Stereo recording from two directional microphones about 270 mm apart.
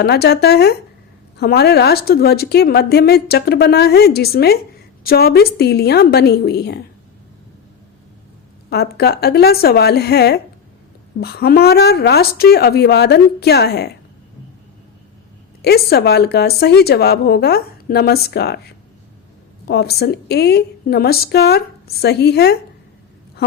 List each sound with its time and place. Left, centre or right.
0.0 s speech: left
8.7 s speech: left
15.6 s speech: left
19.6 s speech: left